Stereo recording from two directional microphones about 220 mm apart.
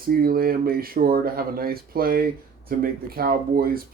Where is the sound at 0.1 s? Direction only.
45° right (ahead or behind).